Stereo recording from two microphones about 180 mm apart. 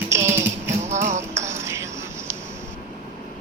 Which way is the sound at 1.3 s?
15° right (ahead or behind).